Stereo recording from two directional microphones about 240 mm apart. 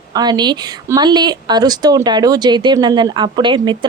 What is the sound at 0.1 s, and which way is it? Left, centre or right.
Speech, centre.